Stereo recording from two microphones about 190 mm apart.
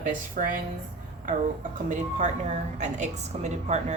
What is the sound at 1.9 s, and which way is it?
A woman's voice, 40° right (ahead or behind).